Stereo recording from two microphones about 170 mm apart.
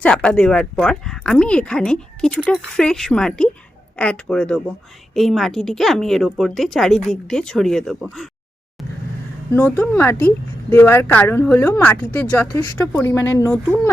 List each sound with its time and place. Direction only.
0.0 s speech: 5° left (ahead or behind)
9.5 s speech: 10° left (ahead or behind)
12.5 s speech: 20° left (ahead or behind)